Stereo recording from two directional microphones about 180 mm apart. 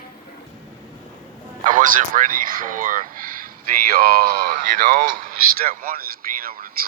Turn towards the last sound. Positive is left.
turn(degrees=-55)  # may be behind; listen again after turning